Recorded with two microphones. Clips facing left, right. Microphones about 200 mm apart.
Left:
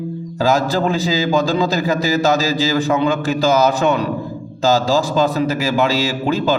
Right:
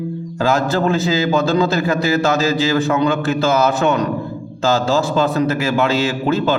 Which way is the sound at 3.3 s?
35° left (ahead or behind).